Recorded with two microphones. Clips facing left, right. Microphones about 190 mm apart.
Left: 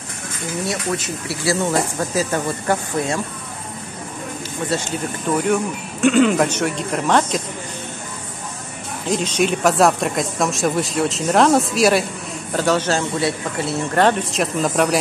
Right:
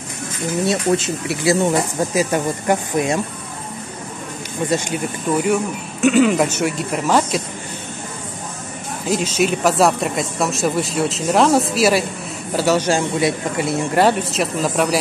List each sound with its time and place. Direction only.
0.7 s speech: 25° right (ahead or behind)
4.6 s speech: 15° right (ahead or behind)
9.1 s speech: 5° right (ahead or behind)